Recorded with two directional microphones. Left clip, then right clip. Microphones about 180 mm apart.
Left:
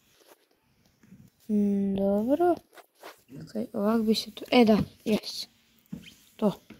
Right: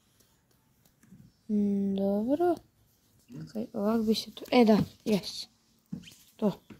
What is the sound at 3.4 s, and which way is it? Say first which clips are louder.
Speech: left 3 dB; 10° left (ahead or behind).